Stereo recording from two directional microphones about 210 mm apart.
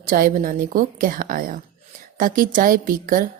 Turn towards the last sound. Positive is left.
turn(degrees=-40)  # may be behind; listen again after turning